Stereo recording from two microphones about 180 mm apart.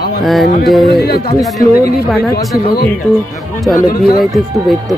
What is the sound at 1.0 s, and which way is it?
Speech, 60° left (ahead or behind).